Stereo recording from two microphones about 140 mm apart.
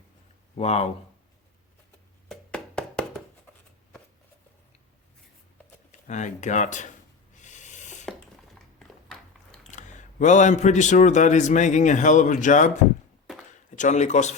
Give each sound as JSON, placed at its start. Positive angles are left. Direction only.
{"t": 0.5, "sound": "speech", "side_deg": 50}
{"t": 2.3, "sound": "music", "side_deg": 5}
{"t": 5.9, "sound": "speech", "side_deg": 60}
{"t": 7.3, "sound": "snort", "side_deg": 60}
{"t": 9.7, "sound": "a man's voice", "side_deg": 60}
{"t": 13.7, "sound": "a man's voice", "side_deg": 60}